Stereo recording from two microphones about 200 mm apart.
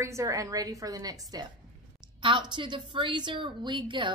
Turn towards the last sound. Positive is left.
turn(degrees=-25)  # may be behind; listen again after turning